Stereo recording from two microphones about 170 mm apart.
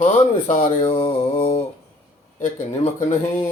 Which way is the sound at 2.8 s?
45° left (ahead or behind).